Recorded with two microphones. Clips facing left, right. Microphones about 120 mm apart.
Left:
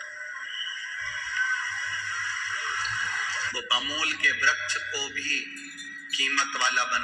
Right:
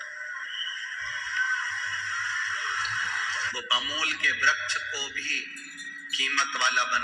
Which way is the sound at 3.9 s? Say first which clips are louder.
Left 1 dB; 40° left (ahead or behind).